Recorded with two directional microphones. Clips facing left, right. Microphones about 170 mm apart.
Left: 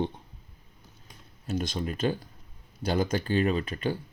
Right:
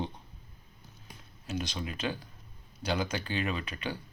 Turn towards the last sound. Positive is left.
turn(degrees=45)  # may be behind; listen again after turning